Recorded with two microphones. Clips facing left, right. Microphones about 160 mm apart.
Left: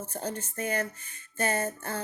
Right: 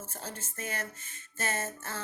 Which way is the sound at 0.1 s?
35° left (ahead or behind).